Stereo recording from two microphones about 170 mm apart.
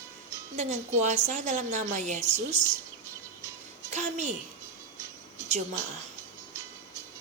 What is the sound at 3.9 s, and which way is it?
Speech, 45° right (ahead or behind).